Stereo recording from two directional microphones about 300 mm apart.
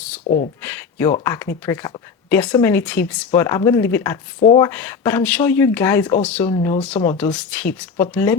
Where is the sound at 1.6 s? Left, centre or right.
Centre.